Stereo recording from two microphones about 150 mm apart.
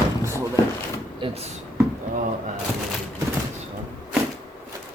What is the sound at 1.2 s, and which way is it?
Speech, 45° right (ahead or behind).